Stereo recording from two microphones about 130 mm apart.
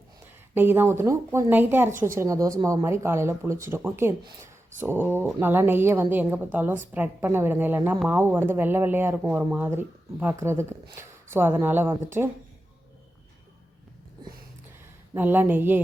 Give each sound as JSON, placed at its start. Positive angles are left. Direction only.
{"t": 0.5, "sound": "speech", "side_deg": -15}
{"t": 15.1, "sound": "speech", "side_deg": -15}